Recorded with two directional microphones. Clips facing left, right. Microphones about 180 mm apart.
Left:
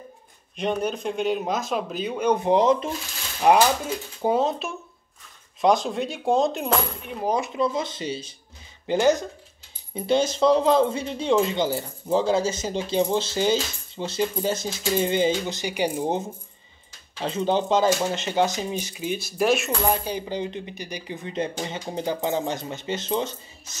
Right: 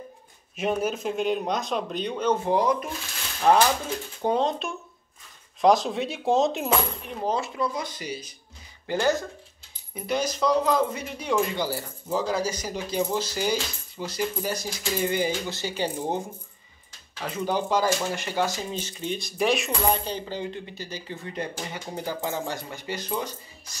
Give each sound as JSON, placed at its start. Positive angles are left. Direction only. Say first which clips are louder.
{"t": 0.6, "sound": "speech", "louder": "even", "side_deg": -5}
{"t": 3.4, "sound": "speech", "louder": "left 2 dB", "side_deg": 10}
{"t": 7.2, "sound": "speech", "louder": "left 3 dB", "side_deg": 20}